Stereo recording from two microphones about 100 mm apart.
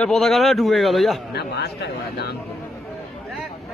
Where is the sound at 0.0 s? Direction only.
5° left (ahead or behind).